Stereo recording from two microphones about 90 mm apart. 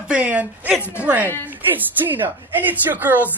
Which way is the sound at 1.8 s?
20° right (ahead or behind).